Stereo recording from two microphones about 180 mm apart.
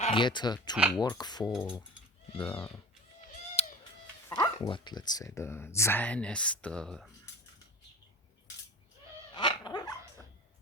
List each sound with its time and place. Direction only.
0.0 s speech: 25° left (ahead or behind)
3.6 s a sound: 35° left (ahead or behind)
4.3 s speech: 20° left (ahead or behind); by 7.1 s 5° left (ahead or behind)
9.3 s dog: 25° left (ahead or behind)